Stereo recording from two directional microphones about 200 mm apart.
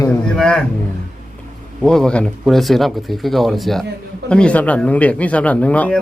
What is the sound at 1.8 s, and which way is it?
Speech, 5° left (ahead or behind).